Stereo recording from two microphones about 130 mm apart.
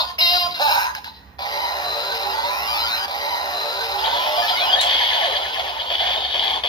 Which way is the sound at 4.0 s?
35° left (ahead or behind).